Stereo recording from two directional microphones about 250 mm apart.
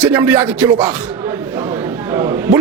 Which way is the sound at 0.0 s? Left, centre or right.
Centre.